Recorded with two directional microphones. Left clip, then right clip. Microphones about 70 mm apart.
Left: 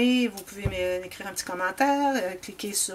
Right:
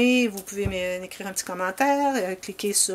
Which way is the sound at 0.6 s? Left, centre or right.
Right.